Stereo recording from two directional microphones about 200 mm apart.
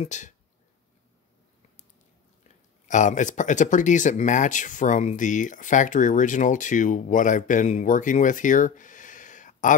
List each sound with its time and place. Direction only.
0.0 s speech: 35° left (ahead or behind)
2.4 s speech: 40° left (ahead or behind)